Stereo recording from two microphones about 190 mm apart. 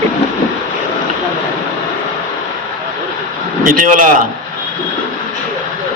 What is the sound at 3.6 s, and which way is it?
Speech, 45° right (ahead or behind).